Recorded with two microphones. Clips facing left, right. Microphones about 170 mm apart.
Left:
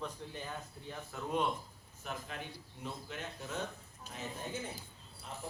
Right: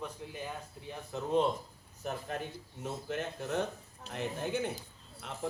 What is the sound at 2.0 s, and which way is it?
Speech, 40° right (ahead or behind).